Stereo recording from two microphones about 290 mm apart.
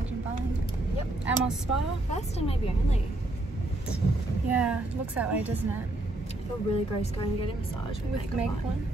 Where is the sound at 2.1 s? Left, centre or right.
Left.